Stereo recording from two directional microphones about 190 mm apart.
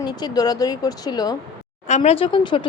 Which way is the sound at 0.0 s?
20° left (ahead or behind).